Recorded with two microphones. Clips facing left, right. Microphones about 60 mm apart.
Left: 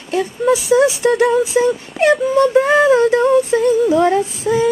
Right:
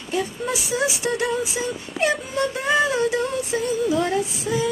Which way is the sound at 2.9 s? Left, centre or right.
Left.